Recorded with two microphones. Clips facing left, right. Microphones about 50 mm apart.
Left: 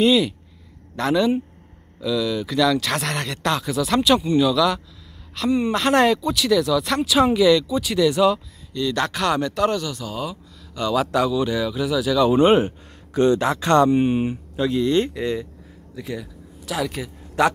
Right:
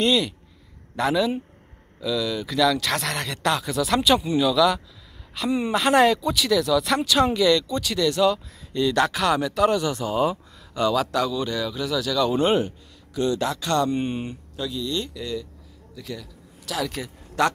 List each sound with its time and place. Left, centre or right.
0.0 s speech: centre
8.8 s speech: centre
9.9 s speech: right
10.9 s speech: centre
12.5 s speech: left
13.8 s speech: centre
14.6 s speech: left
16.0 s speech: left
16.6 s speech: centre